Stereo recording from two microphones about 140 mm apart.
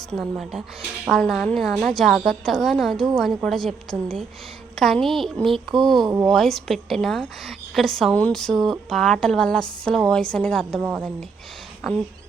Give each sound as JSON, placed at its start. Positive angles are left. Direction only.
{"t": 0.1, "sound": "a woman's voice", "side_deg": 0}
{"t": 6.1, "sound": "speech", "side_deg": -20}
{"t": 6.3, "sound": "a woman's voice", "side_deg": 0}